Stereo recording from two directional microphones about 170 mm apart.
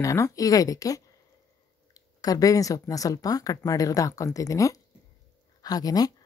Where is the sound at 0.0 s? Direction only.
20° left (ahead or behind).